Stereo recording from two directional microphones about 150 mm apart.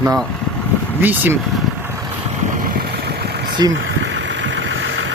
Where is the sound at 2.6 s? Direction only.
85° right.